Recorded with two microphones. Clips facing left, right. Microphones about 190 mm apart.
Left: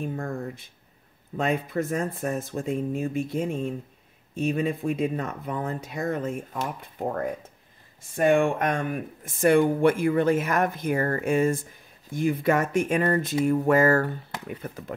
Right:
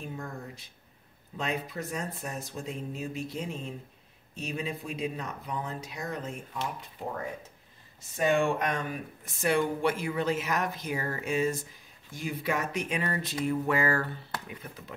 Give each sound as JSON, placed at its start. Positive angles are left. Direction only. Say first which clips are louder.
{"t": 0.0, "sound": "speech", "louder": "left 8 dB", "side_deg": 55}